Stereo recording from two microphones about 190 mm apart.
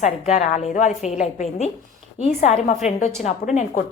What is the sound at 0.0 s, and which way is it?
A woman's voice, 40° left (ahead or behind).